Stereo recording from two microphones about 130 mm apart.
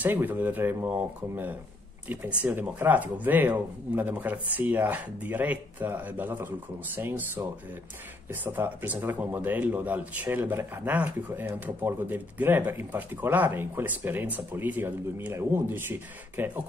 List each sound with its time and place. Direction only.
0.0 s speech: 15° right (ahead or behind)
8.3 s speech: 15° right (ahead or behind)